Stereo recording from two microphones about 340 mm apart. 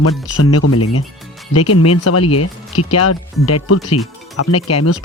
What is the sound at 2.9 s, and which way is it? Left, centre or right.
Speech, left.